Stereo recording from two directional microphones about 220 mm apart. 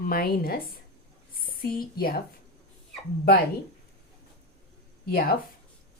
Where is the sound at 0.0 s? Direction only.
40° left (ahead or behind).